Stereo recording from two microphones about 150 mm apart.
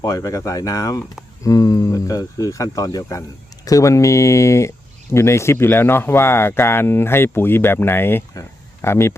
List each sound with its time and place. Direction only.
0.0 s speech: 25° left (ahead or behind)